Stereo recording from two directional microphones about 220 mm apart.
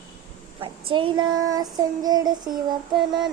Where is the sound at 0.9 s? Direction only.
20° right (ahead or behind).